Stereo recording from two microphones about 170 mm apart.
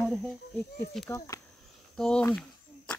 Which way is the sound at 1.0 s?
20° left (ahead or behind).